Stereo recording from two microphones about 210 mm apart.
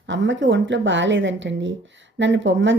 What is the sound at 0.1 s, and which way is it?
Speech, 60° right (ahead or behind).